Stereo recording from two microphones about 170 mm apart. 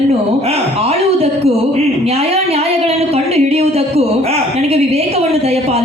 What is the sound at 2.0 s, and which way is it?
A woman's voice, 35° right (ahead or behind).